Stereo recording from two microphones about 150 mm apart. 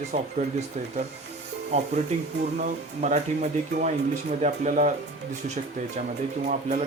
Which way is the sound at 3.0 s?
55° right (ahead or behind).